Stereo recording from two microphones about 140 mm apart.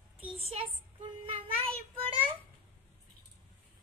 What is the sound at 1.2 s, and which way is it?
Child singing, 40° right (ahead or behind).